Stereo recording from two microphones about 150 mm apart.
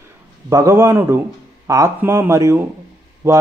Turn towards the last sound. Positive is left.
turn(degrees=-20)  # may be behind; listen again after turning